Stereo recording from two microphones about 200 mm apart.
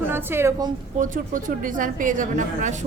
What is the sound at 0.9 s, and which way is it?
A woman's voice, 40° right (ahead or behind).